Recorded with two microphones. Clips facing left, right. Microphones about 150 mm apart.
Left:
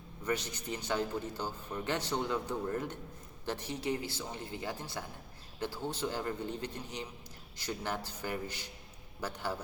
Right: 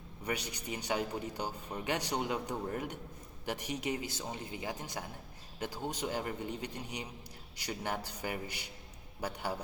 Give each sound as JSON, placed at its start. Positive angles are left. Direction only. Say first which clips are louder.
{"t": 0.3, "sound": "a man's voice", "louder": "left 2 dB", "side_deg": -15}